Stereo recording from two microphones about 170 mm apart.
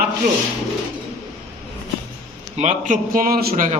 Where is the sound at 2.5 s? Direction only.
45° right (ahead or behind).